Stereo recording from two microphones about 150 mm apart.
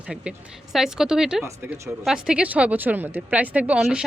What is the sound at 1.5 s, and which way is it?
Speech, 20° right (ahead or behind).